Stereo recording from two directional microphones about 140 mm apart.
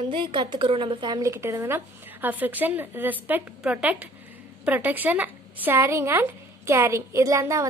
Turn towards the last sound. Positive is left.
turn(degrees=-20)  # may be behind; listen again after turning